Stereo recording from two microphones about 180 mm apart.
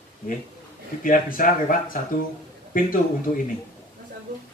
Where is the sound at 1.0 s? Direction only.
50° left (ahead or behind).